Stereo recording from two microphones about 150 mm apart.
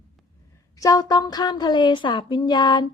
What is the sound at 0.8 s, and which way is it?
A woman's voice, 25° left (ahead or behind).